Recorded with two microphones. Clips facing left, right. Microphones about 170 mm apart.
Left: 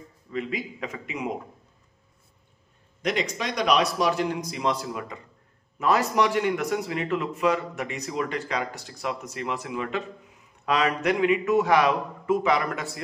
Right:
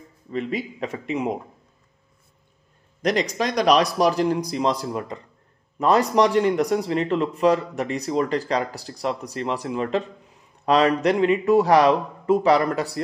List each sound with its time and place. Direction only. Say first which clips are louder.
0.3 s speech: right 4 dB; 30° right (ahead or behind)
3.0 s speech: right 5 dB; 40° right (ahead or behind)